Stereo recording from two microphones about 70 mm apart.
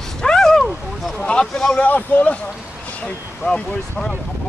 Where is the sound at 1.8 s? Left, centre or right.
Left.